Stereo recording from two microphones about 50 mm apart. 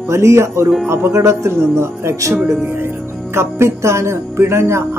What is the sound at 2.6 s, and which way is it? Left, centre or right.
Speech, right.